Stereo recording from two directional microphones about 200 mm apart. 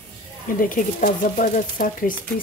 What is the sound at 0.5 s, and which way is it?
Speech, 45° left (ahead or behind).